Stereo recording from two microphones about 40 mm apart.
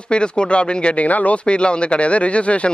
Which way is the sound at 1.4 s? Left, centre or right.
Left.